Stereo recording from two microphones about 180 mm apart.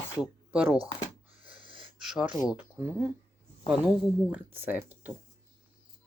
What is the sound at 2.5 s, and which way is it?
Speech, 10° right (ahead or behind).